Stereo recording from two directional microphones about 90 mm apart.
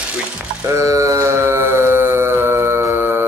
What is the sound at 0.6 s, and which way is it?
Mantra, 35° right (ahead or behind).